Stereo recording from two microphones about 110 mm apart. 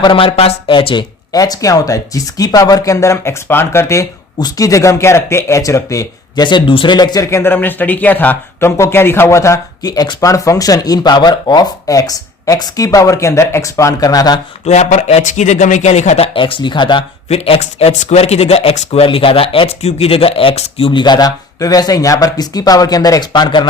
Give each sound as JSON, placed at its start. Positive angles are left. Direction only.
{"t": 0.0, "sound": "speech", "side_deg": 50}
{"t": 1.3, "sound": "speech", "side_deg": 35}
{"t": 4.4, "sound": "speech", "side_deg": 35}
{"t": 6.4, "sound": "speech", "side_deg": 50}
{"t": 7.3, "sound": "speech", "side_deg": 20}
{"t": 14.6, "sound": "a man's voice", "side_deg": 90}
{"t": 17.2, "sound": "a man's voice", "side_deg": 65}
{"t": 21.0, "sound": "speech", "side_deg": 40}